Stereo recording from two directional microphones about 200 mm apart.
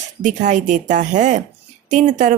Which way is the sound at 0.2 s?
40° right (ahead or behind).